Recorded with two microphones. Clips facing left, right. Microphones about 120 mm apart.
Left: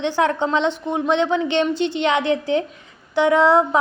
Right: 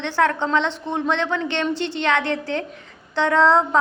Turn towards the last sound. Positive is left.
turn(degrees=15)  # may be behind; listen again after turning